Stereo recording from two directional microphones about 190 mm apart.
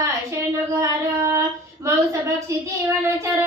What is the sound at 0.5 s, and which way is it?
Speech, 15° right (ahead or behind).